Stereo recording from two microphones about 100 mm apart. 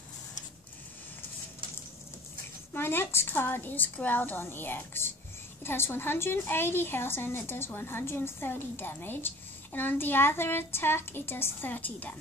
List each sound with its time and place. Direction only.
2.7 s a woman's voice: 20° left (ahead or behind)